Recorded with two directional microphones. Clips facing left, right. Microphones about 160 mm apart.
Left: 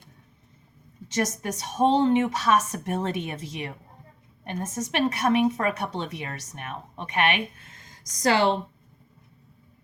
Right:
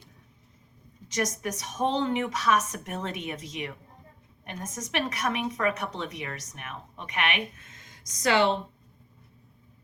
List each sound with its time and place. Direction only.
1.0 s a woman's voice: 30° left (ahead or behind)